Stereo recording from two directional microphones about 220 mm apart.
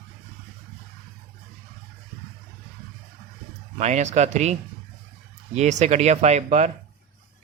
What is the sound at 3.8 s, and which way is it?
Speech, 30° right (ahead or behind).